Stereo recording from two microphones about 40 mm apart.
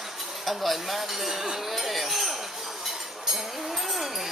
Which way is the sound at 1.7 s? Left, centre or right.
Centre.